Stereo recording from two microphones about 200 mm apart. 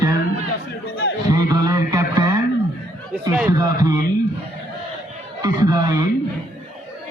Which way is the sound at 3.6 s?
20° right (ahead or behind).